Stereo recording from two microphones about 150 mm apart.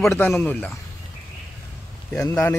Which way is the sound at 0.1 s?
15° left (ahead or behind).